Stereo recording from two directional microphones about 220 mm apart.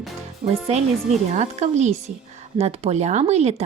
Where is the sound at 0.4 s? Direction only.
30° right (ahead or behind).